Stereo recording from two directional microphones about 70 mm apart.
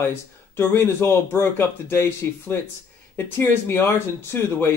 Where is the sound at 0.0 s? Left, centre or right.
Left.